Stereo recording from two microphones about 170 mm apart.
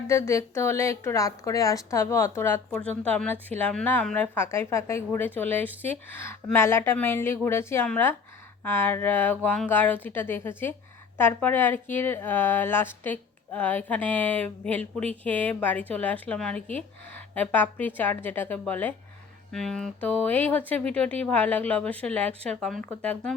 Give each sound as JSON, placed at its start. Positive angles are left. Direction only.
{"t": 0.1, "sound": "a woman's voice", "side_deg": 15}